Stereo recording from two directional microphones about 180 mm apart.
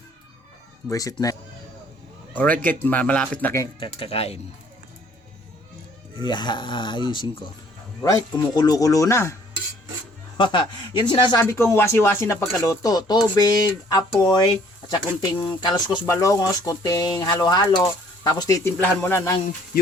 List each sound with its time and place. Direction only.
0.9 s speech: 20° left (ahead or behind)
2.4 s speech: 10° left (ahead or behind)
3.8 s speech: 30° left (ahead or behind)
6.2 s speech: 25° left (ahead or behind)
10.3 s speech: 25° left (ahead or behind)